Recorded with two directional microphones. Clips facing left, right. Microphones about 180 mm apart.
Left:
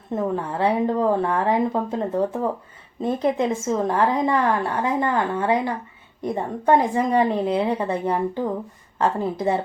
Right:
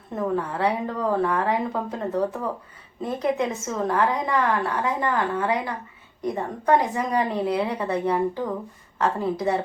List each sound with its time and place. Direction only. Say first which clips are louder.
0.2 s a woman's voice: left 1 dB; 30° left (ahead or behind)